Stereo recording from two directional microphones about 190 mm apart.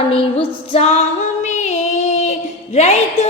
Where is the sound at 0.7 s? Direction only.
35° left (ahead or behind).